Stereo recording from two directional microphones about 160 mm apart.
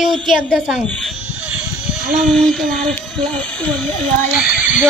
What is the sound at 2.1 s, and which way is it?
Speech, centre (ahead or behind).